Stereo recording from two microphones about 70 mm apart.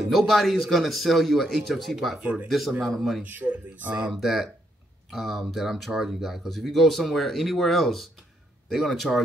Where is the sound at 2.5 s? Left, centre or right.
Centre.